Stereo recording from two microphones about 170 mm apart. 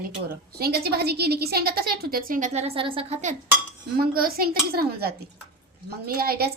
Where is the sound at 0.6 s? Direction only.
65° right (ahead or behind); by 3.3 s 40° right (ahead or behind).